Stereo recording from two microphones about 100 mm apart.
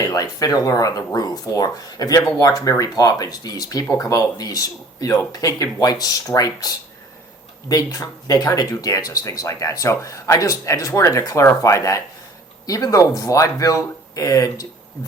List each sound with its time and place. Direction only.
0.0 s speech: 35° left (ahead or behind)